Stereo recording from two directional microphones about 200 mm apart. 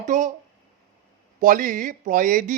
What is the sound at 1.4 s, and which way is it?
Speech, 40° right (ahead or behind).